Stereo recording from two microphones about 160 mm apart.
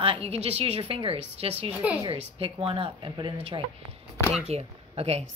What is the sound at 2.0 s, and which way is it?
Speech, 35° right (ahead or behind).